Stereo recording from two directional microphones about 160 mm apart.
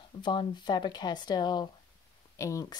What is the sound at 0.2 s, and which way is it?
Speech, 30° left (ahead or behind).